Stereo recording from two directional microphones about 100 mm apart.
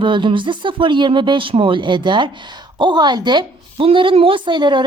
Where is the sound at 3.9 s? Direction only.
65° right (ahead or behind).